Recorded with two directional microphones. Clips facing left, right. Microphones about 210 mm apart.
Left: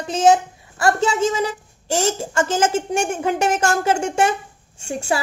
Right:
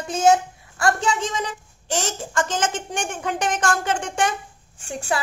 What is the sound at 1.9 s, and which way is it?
Speech, 25° left (ahead or behind).